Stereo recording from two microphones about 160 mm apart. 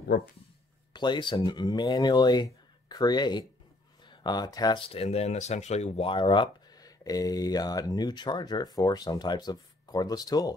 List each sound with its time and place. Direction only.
0.1 s speech: 70° left (ahead or behind)
0.9 s speech: 30° left (ahead or behind)